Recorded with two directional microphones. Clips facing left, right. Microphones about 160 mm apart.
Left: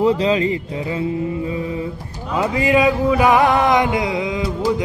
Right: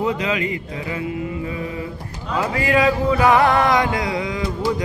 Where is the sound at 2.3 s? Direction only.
20° left (ahead or behind).